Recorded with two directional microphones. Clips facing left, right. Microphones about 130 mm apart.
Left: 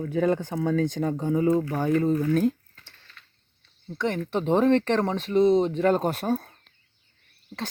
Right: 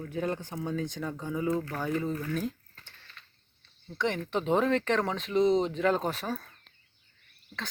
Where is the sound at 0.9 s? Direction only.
35° left (ahead or behind).